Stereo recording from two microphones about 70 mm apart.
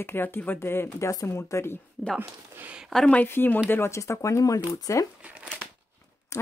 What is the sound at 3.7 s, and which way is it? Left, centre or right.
Speech, left.